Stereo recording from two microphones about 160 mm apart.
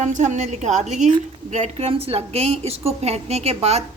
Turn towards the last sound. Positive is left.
turn(degrees=-40)  # may be behind; listen again after turning